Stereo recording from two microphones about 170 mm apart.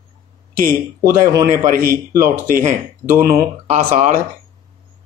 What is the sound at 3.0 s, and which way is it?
Speech, 10° right (ahead or behind).